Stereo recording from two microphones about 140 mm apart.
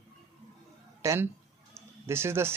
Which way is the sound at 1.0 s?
20° right (ahead or behind).